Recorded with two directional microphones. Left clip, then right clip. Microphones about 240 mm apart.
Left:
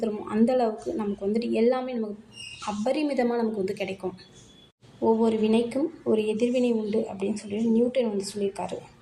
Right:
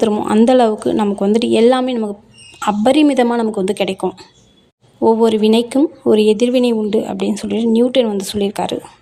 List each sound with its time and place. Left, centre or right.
0.0 s speech: right
4.9 s speech: right